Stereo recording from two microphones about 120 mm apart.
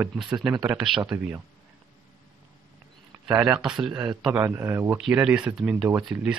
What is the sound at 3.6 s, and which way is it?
Speech, 5° right (ahead or behind).